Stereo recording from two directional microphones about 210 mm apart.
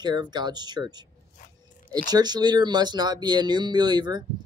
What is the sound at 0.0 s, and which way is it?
Speech, 20° right (ahead or behind).